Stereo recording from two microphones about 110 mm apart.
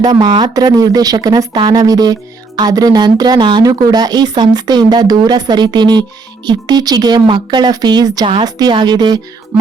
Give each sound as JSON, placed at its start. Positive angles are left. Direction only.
{"t": 0.0, "sound": "speech", "side_deg": -35}